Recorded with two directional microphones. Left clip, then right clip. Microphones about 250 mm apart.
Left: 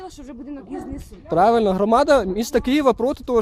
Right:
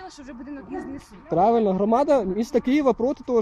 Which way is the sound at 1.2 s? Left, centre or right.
Left.